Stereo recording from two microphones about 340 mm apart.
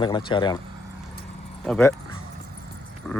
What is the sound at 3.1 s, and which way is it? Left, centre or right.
Speech, centre.